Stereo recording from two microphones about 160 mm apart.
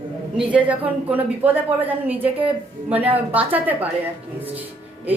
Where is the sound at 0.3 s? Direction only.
10° right (ahead or behind).